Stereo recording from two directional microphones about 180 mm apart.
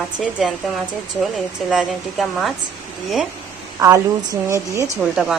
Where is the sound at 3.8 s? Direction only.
15° right (ahead or behind).